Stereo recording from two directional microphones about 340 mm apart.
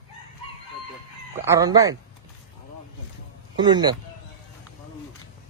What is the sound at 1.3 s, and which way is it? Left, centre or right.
Speech, centre.